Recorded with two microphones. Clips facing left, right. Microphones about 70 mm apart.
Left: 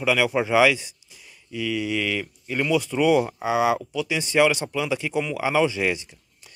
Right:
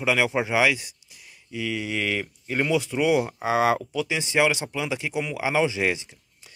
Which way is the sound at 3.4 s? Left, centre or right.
Right.